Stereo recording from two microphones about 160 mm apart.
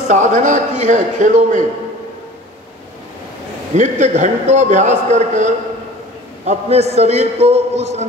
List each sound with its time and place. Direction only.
0.1 s a man's voice: 50° right (ahead or behind)
3.7 s a man's voice: 45° right (ahead or behind)